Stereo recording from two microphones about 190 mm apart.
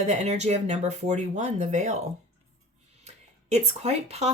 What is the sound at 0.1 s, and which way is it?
Speech, 35° right (ahead or behind).